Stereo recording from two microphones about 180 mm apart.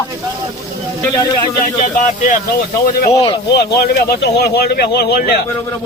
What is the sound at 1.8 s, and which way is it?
Speech, 45° left (ahead or behind).